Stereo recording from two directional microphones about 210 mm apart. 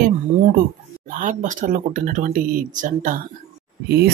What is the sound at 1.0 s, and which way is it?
Speech, 40° right (ahead or behind).